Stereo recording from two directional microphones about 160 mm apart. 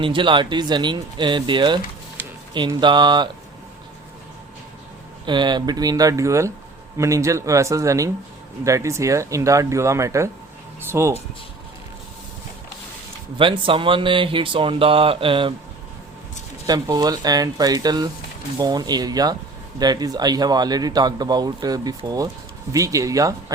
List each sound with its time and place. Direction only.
0.0 s speech: 30° right (ahead or behind)
5.2 s speech: 30° right (ahead or behind)
13.4 s speech: 30° right (ahead or behind)
16.6 s speech: 25° right (ahead or behind)